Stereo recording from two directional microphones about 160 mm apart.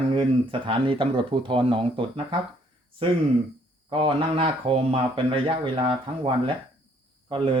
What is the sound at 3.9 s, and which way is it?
Speech, 35° right (ahead or behind).